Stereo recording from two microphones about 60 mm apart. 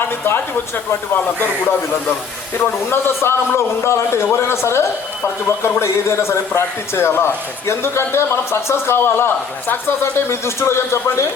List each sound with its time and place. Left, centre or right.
0.9 s speech: left
2.9 s a man's voice: left